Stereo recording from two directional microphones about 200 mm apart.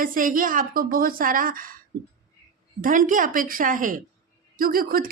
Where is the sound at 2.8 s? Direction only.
40° right (ahead or behind).